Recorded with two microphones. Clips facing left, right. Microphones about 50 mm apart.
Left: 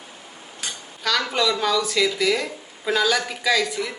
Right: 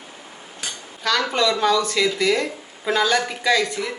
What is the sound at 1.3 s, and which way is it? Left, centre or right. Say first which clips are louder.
Speech: right 3 dB; centre.